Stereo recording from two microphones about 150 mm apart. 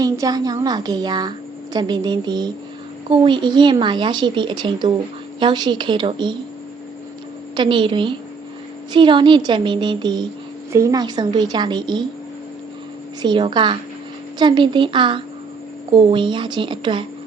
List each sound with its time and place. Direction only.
0.0 s a woman's voice: 25° right (ahead or behind)
7.5 s speech: 30° right (ahead or behind)
10.7 s a woman's voice: 20° right (ahead or behind)
13.2 s speech: 30° right (ahead or behind)